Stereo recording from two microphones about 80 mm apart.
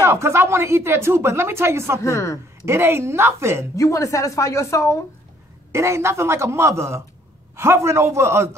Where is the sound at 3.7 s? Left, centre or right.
Left.